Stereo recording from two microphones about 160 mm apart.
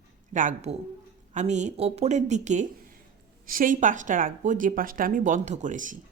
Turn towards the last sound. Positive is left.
turn(degrees=-55)  # may be behind; listen again after turning